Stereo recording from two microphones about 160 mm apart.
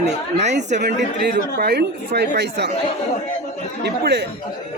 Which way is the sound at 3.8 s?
90° right.